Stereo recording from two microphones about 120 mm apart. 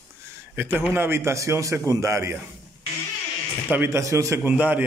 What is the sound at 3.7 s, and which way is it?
A man's voice, 20° right (ahead or behind).